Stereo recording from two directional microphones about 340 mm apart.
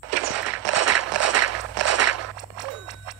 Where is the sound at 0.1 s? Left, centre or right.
Right.